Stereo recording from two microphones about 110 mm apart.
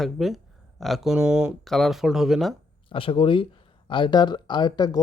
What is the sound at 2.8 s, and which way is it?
Speech, 55° left (ahead or behind).